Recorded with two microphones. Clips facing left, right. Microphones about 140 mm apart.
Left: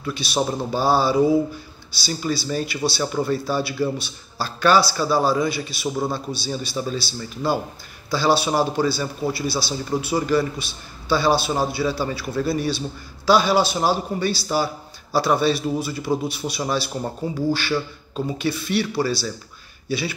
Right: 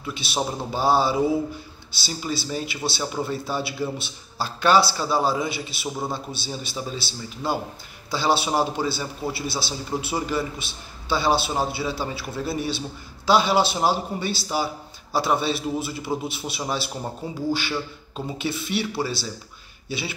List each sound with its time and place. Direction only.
0.0 s a man's voice: 20° right (ahead or behind)